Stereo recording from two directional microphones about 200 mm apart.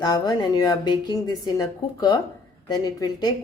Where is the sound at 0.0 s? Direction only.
20° left (ahead or behind).